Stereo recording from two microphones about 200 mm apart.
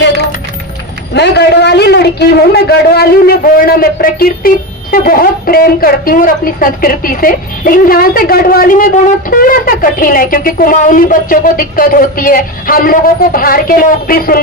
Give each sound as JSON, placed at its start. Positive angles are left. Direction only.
{"t": 1.1, "sound": "a man's voice", "side_deg": 55}